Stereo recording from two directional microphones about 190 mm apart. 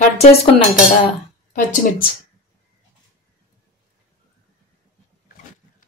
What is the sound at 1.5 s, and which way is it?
Speech, 45° left (ahead or behind).